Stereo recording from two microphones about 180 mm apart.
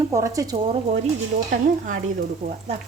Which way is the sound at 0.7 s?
40° right (ahead or behind).